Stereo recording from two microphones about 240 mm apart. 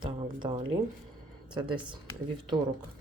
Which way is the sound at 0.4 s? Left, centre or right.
Centre.